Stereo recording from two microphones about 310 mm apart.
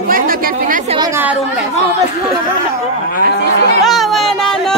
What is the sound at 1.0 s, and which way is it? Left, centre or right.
Speech, centre.